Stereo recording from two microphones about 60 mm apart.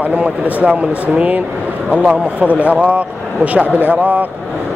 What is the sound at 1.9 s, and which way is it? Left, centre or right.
Speech, right.